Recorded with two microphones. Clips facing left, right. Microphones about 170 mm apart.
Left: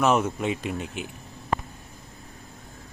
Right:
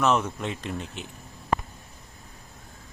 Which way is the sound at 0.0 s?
10° left (ahead or behind).